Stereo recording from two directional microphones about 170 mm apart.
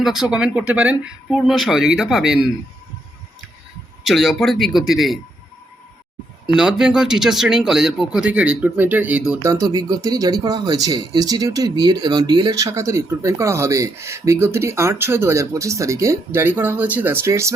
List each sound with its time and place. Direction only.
0.0 s speech: centre (ahead or behind)
4.0 s speech: centre (ahead or behind)
6.6 s speech: 5° right (ahead or behind)
9.4 s speech: 20° right (ahead or behind)